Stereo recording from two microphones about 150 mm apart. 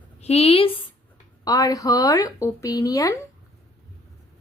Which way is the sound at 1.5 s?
25° left (ahead or behind).